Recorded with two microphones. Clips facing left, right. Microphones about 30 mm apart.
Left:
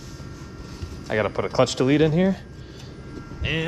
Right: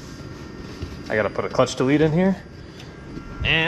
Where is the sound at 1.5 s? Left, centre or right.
Left.